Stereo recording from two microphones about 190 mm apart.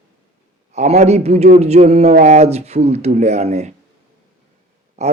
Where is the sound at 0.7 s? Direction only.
35° right (ahead or behind).